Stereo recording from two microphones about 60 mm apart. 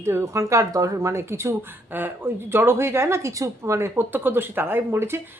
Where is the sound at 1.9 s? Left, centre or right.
Right.